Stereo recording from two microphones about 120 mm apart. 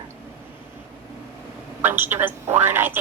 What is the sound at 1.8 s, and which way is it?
A woman's voice, 15° right (ahead or behind).